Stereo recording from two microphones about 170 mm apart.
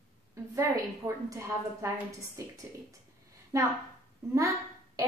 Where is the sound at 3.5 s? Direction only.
20° right (ahead or behind).